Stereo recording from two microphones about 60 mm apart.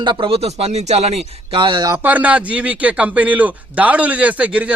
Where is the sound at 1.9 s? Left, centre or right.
Right.